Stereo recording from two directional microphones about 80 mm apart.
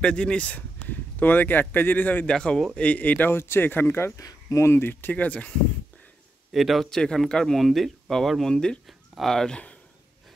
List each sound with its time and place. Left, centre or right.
0.0 s speech: centre
2.2 s speech: centre; by 4.1 s left
4.2 s speech: left; by 5.5 s centre
6.5 s speech: centre